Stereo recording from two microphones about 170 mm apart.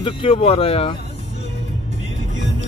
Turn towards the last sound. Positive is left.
turn(degrees=35)  # may be behind; listen again after turning